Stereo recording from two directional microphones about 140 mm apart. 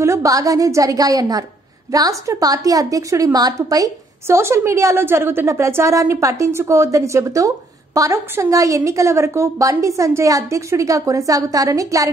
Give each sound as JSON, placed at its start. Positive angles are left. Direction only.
{"t": 0.0, "sound": "a woman's voice", "side_deg": -20}